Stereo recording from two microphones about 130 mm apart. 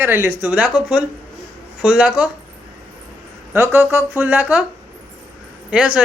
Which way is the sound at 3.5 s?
15° right (ahead or behind).